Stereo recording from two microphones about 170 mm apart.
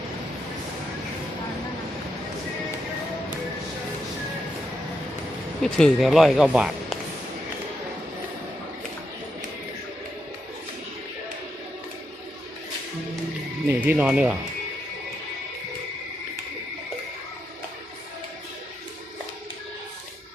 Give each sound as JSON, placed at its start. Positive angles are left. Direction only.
{"t": 5.6, "sound": "speech", "side_deg": 5}
{"t": 13.7, "sound": "speech", "side_deg": -10}